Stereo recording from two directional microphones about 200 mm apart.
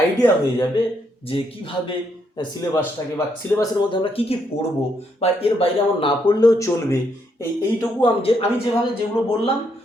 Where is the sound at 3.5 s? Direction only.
20° left (ahead or behind).